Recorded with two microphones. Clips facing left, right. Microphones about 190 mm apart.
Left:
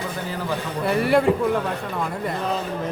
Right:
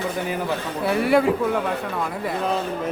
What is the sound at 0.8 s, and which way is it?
Speech, centre (ahead or behind).